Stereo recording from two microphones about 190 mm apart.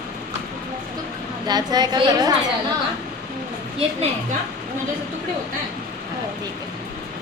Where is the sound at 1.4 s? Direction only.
20° right (ahead or behind).